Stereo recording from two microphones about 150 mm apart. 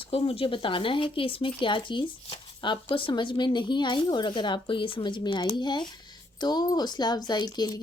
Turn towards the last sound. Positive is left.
turn(degrees=25)  # may be behind; listen again after turning